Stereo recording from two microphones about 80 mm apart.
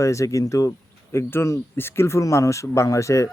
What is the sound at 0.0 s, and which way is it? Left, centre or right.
Speech, left.